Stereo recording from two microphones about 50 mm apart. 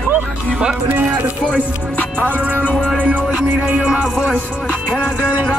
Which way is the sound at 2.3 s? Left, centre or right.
Right.